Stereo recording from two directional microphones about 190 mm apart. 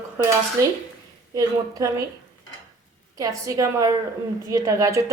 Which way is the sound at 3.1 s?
15° right (ahead or behind).